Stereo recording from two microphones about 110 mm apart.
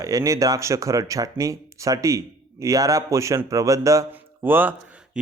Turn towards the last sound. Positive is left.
turn(degrees=-10)  # may be behind; listen again after turning